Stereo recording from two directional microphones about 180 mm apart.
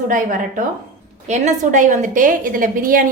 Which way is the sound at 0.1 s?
45° right (ahead or behind).